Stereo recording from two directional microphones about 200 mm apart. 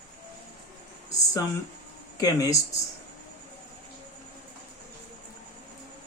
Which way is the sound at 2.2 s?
20° left (ahead or behind).